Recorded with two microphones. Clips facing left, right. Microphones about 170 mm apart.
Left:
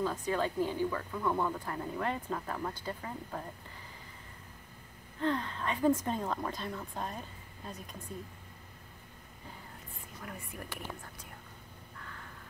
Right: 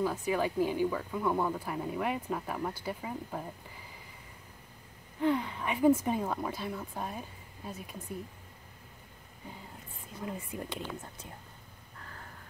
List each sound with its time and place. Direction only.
0.0 s speech: 10° right (ahead or behind)
5.2 s speech: 10° right (ahead or behind)
10.2 s speech: 20° right (ahead or behind)
12.0 s a sound: 35° right (ahead or behind)